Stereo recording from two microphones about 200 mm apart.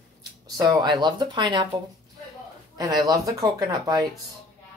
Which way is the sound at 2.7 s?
20° right (ahead or behind).